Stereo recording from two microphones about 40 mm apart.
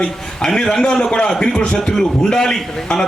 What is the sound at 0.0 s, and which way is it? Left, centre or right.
A man's voice, left.